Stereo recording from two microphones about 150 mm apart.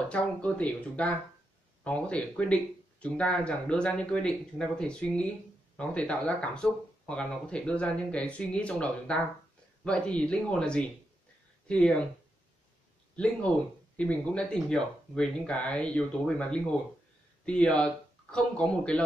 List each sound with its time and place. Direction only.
0.1 s speech: 10° left (ahead or behind)
13.1 s speech: 10° left (ahead or behind)